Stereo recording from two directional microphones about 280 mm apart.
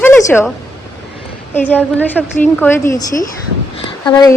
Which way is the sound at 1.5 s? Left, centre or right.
Centre.